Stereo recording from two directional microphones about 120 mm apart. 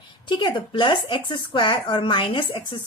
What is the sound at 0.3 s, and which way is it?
A woman's voice, 45° left (ahead or behind).